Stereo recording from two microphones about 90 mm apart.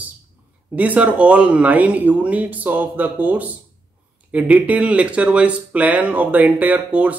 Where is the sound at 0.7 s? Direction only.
15° right (ahead or behind).